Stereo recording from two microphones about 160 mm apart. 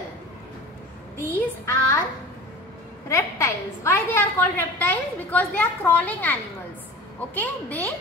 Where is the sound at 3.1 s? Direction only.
15° left (ahead or behind).